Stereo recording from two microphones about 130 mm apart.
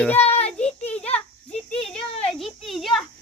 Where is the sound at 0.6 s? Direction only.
10° left (ahead or behind).